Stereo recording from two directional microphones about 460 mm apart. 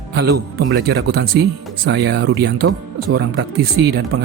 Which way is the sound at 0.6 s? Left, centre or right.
Right.